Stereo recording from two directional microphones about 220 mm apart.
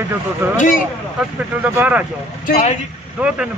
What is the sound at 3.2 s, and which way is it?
Speech, 5° right (ahead or behind).